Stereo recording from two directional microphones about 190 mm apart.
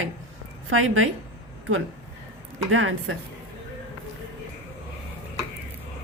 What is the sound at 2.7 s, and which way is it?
Speech, 90° right.